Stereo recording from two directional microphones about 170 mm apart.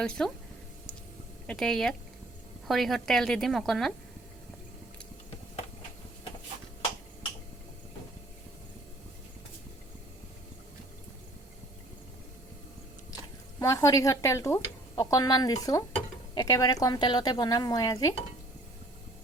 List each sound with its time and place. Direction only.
0.0 s a woman's voice: 5° left (ahead or behind)
1.5 s a woman's voice: 5° left (ahead or behind)
13.1 s a sound: 20° left (ahead or behind)
14.9 s a woman's voice: 20° left (ahead or behind)